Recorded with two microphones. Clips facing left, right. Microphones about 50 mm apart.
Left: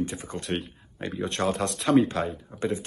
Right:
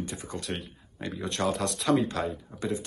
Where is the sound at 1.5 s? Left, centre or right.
Left.